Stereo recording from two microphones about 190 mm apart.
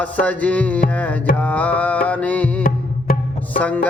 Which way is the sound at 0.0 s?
10° left (ahead or behind).